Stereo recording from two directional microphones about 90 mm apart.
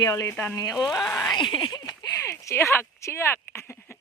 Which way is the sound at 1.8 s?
45° left (ahead or behind).